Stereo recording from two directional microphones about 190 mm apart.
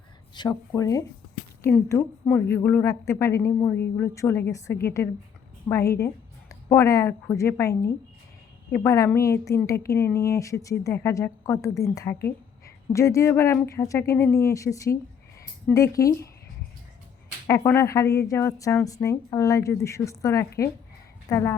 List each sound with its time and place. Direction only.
0.3 s a woman's voice: 20° left (ahead or behind)
8.7 s speech: 15° left (ahead or behind)
17.4 s a woman's voice: 15° left (ahead or behind)